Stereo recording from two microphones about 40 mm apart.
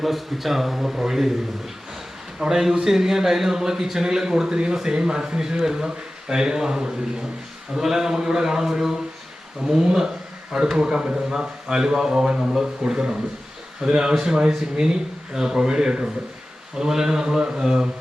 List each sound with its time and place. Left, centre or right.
0.0 s a man's voice: centre
2.5 s speech: centre